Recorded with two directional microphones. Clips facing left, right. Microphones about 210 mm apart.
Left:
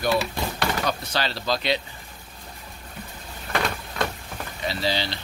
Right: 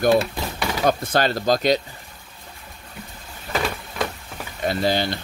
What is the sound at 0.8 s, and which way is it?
Speech, 50° right (ahead or behind).